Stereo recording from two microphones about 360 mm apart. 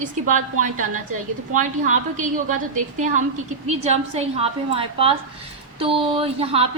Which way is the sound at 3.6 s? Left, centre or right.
Centre.